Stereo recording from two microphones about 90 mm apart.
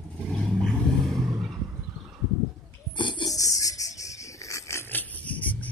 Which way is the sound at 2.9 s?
60° left (ahead or behind).